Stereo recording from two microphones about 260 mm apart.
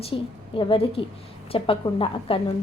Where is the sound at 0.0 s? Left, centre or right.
Centre.